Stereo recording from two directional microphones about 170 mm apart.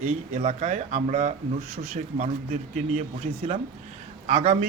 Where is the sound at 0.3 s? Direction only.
40° right (ahead or behind).